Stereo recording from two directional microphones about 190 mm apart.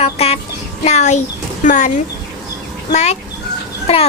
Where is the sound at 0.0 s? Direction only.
35° left (ahead or behind).